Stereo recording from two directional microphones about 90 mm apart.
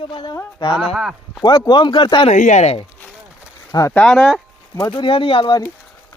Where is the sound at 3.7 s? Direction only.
40° left (ahead or behind).